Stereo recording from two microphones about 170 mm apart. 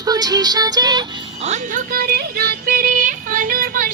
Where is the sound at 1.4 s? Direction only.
45° right (ahead or behind).